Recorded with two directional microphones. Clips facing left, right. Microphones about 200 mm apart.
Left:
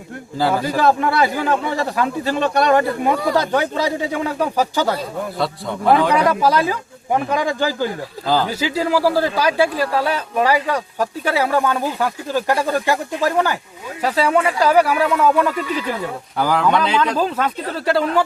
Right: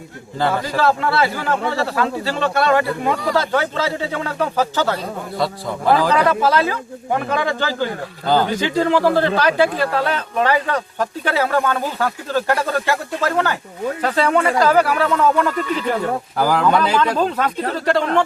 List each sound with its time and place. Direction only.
0.3 s a man's voice: centre (ahead or behind)
0.6 s speech: 15° left (ahead or behind)
5.4 s a man's voice: centre (ahead or behind)
6.2 s speech: 15° left (ahead or behind)
8.3 s a man's voice: 5° left (ahead or behind)